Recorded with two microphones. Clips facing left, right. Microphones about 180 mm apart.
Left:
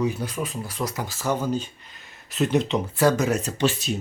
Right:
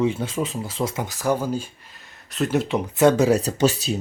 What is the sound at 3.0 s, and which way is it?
Speech, 30° right (ahead or behind).